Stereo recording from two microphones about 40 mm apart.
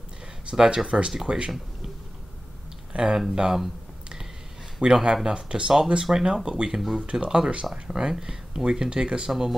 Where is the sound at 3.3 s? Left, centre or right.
Centre.